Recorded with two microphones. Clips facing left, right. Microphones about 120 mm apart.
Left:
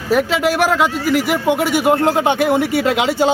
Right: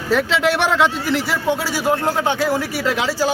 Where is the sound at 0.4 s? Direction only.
5° left (ahead or behind).